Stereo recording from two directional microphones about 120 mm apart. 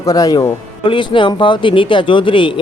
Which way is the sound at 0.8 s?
45° left (ahead or behind).